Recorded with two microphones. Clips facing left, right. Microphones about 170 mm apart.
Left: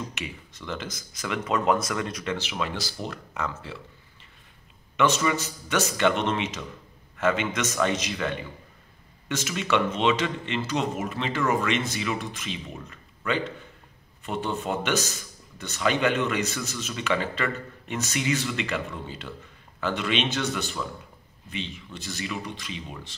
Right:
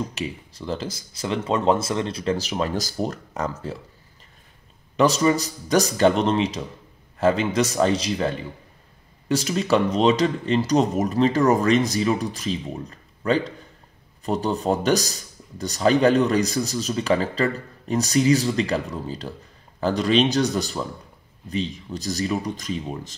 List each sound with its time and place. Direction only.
0.1 s speech: 35° right (ahead or behind)
4.9 s speech: 35° right (ahead or behind)